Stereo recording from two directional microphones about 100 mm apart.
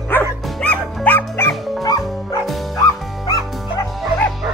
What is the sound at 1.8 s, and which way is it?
Music, 40° left (ahead or behind).